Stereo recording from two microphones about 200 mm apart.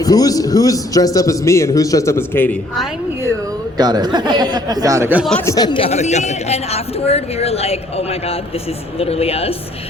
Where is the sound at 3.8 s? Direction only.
20° right (ahead or behind).